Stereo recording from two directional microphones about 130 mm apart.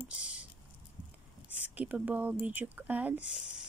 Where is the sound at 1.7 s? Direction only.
10° right (ahead or behind).